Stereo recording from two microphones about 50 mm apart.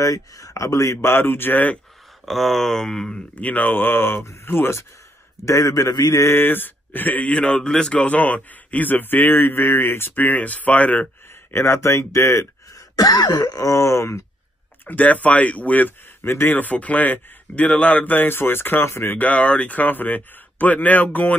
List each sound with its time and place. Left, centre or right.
0.0 s speech: left
1.2 s speech: left
2.2 s speech: centre
3.4 s speech: left
5.4 s speech: left
6.3 s speech: left
7.3 s speech: centre
8.1 s speech: left
11.5 s speech: left
13.7 s speech: left
14.9 s speech: left
16.2 s speech: left
18.0 s speech: left
19.1 s speech: left